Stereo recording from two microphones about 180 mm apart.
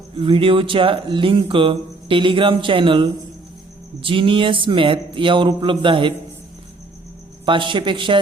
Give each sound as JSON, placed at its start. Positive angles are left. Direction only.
{"t": 0.2, "sound": "speech", "side_deg": -30}
{"t": 7.4, "sound": "speech", "side_deg": -25}